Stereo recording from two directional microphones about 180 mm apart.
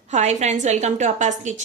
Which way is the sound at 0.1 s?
40° right (ahead or behind).